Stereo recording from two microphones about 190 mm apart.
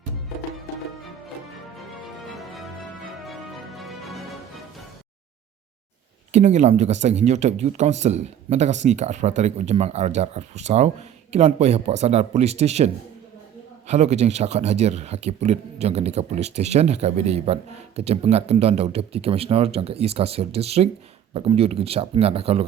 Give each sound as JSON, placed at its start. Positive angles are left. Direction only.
{"t": 2.1, "sound": "music", "side_deg": 0}
{"t": 3.8, "sound": "music", "side_deg": 0}
{"t": 6.3, "sound": "speech", "side_deg": -35}